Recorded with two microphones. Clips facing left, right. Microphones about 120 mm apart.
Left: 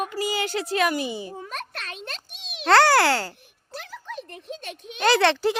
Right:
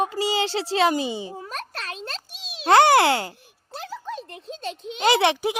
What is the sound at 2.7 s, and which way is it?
Speech, 20° right (ahead or behind).